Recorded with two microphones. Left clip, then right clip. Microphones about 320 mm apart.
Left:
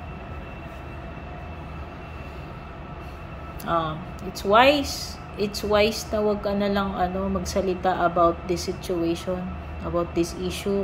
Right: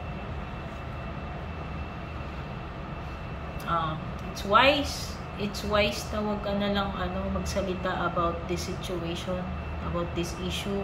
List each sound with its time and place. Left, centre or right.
3.7 s a woman's voice: left